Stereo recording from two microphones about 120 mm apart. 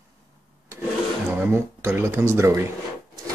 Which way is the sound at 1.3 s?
20° right (ahead or behind).